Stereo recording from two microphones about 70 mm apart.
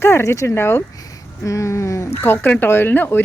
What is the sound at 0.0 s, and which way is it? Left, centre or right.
Speech, left.